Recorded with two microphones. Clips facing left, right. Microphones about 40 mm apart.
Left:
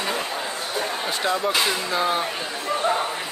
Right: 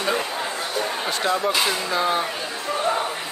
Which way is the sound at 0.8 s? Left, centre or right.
Centre.